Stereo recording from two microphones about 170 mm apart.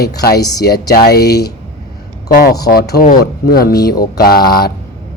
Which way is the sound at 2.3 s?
60° left (ahead or behind).